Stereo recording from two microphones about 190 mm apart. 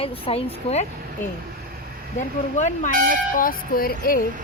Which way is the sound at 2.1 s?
40° left (ahead or behind).